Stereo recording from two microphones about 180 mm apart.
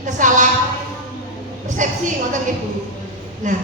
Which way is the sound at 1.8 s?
45° right (ahead or behind).